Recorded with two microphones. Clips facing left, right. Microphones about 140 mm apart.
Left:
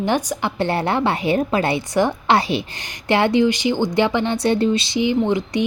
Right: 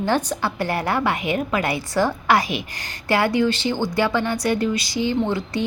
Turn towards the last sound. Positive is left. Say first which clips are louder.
# left 3 dB
turn(degrees=20)  # may be behind; listen again after turning